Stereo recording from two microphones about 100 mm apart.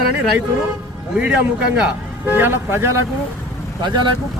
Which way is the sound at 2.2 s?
20° right (ahead or behind).